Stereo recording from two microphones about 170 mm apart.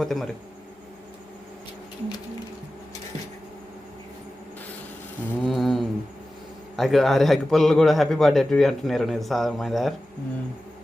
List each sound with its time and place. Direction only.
0.0 s a man's voice: centre (ahead or behind)
5.4 s a man's voice: centre (ahead or behind)